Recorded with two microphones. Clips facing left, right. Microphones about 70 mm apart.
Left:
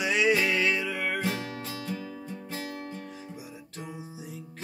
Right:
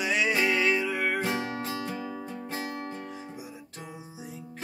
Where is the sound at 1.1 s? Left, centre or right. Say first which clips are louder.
Right 2 dB; right.